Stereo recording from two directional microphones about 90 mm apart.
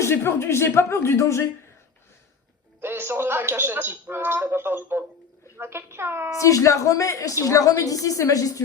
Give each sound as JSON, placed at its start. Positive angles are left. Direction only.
{"t": 0.0, "sound": "speech", "side_deg": 25}
{"t": 2.8, "sound": "speech", "side_deg": -25}
{"t": 6.4, "sound": "a woman's voice", "side_deg": 35}